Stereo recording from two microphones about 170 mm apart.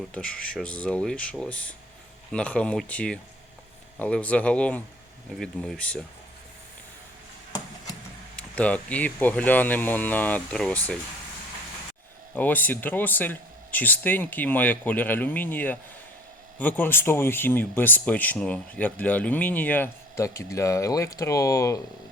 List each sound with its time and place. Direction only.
0.1 s speech: 5° left (ahead or behind)
8.4 s speech: 5° left (ahead or behind)
12.3 s speech: 10° left (ahead or behind)